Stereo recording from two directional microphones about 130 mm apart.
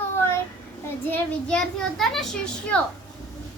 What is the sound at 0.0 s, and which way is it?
Child singing, 20° left (ahead or behind).